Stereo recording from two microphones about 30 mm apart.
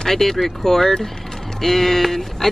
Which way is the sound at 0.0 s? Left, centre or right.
Centre.